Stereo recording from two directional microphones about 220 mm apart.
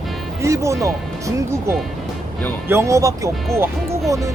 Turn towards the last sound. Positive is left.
turn(degrees=-15)  # may be behind; listen again after turning